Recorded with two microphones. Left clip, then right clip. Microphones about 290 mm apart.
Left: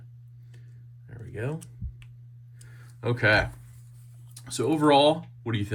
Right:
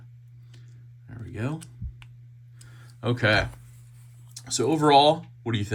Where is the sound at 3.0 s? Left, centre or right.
Centre.